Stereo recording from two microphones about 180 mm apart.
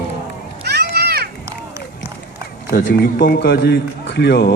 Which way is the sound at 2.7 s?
50° left (ahead or behind).